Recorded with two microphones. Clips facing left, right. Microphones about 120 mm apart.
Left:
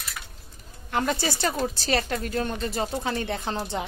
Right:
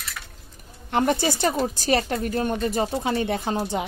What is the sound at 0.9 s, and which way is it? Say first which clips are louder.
Speech: right 4 dB; 20° right (ahead or behind).